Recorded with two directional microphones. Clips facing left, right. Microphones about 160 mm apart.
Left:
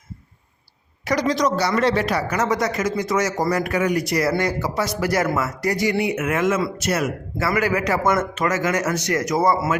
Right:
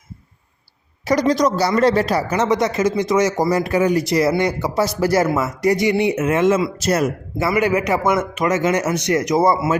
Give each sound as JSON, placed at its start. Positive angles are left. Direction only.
{"t": 1.0, "sound": "speech", "side_deg": -40}
{"t": 7.3, "sound": "speech", "side_deg": -20}